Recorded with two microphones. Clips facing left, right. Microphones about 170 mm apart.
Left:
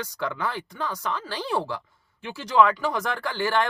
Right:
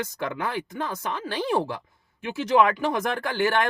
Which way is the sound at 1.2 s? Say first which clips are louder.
Right 5 dB; 20° right (ahead or behind).